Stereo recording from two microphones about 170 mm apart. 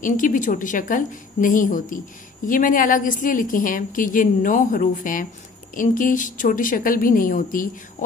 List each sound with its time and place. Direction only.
0.0 s a woman's voice: 50° left (ahead or behind)